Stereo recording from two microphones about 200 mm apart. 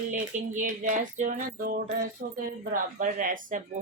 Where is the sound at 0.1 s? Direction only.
40° right (ahead or behind).